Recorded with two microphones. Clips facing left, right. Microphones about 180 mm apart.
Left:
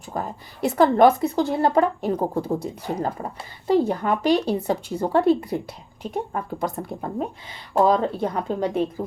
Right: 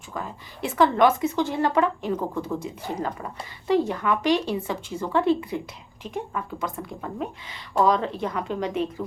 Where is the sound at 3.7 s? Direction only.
40° left (ahead or behind).